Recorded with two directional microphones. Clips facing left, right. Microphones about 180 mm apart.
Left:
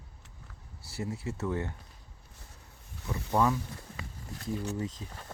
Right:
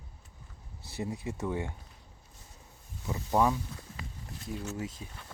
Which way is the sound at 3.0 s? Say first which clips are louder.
Right 1 dB; 10° right (ahead or behind).